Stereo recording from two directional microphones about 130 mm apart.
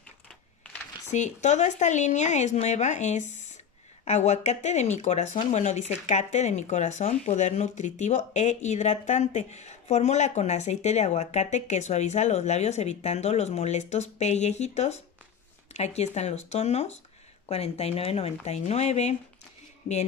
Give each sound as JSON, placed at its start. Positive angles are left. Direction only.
{"t": 1.1, "sound": "speech", "side_deg": 65}